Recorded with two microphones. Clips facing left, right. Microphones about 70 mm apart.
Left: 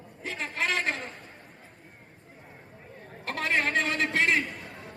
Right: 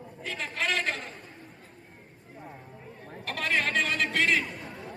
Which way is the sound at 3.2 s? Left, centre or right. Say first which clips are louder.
Left 1 dB; left.